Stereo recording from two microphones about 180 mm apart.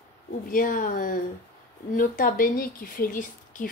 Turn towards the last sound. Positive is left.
turn(degrees=50)  # may be behind; listen again after turning